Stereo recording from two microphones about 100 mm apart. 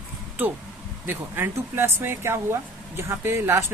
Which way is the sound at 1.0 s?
20° right (ahead or behind).